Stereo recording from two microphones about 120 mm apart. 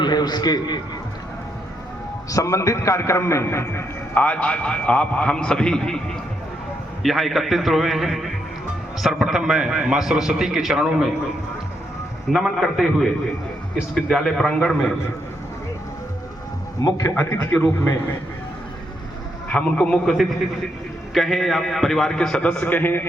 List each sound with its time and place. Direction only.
0.0 s a man's voice: 35° left (ahead or behind)
2.3 s a man's voice: 25° left (ahead or behind); by 11.1 s 5° right (ahead or behind)
12.3 s a man's voice: centre (ahead or behind)
16.8 s a man's voice: 30° left (ahead or behind)
17.2 s a man's voice: 20° left (ahead or behind)
19.5 s a man's voice: 10° left (ahead or behind)
21.1 s a man's voice: centre (ahead or behind); by 23.0 s 15° left (ahead or behind)